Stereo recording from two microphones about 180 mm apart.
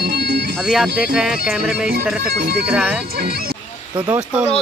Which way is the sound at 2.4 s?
60° right (ahead or behind).